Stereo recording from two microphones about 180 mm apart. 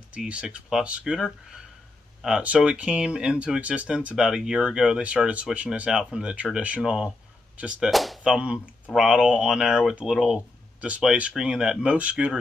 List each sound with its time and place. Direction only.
0.1 s speech: 5° right (ahead or behind)